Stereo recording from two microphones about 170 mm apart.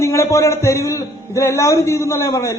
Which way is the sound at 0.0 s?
15° left (ahead or behind).